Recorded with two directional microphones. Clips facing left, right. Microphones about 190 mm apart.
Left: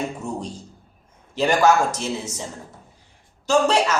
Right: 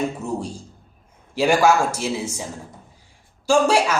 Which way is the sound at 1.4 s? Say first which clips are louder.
Right 1 dB; 10° right (ahead or behind).